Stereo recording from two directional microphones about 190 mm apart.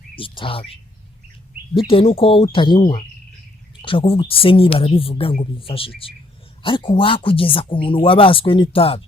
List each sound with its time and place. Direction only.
0.2 s speech: 25° left (ahead or behind)